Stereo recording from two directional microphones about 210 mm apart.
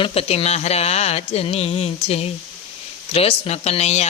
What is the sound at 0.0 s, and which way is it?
Speech, 30° left (ahead or behind).